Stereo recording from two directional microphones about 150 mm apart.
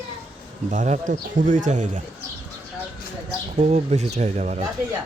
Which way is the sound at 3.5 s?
45° right (ahead or behind).